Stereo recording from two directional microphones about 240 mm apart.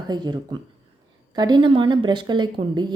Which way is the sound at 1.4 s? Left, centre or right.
Centre.